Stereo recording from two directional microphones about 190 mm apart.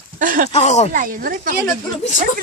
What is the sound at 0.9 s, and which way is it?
Speech, 45° right (ahead or behind).